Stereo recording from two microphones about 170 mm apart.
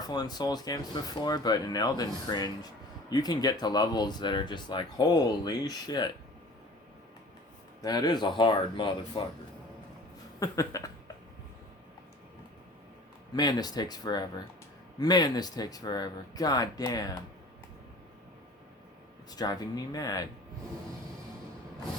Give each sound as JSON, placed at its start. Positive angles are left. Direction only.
{"t": 0.1, "sound": "speech", "side_deg": 25}
{"t": 7.8, "sound": "speech", "side_deg": 25}
{"t": 10.4, "sound": "speech", "side_deg": 20}
{"t": 13.3, "sound": "speech", "side_deg": 25}
{"t": 19.3, "sound": "speech", "side_deg": 20}